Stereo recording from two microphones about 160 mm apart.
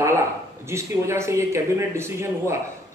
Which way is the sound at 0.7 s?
15° right (ahead or behind).